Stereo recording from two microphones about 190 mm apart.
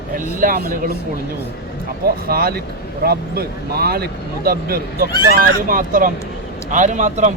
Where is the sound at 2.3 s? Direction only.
55° right (ahead or behind).